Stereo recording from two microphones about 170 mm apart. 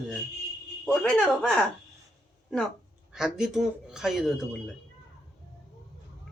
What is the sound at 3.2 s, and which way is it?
Speech, 5° right (ahead or behind).